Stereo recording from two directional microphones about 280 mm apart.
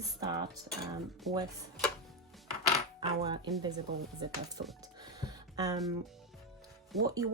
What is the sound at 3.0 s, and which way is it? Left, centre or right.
Speech, centre.